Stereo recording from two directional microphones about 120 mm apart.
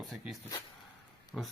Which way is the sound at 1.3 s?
10° left (ahead or behind).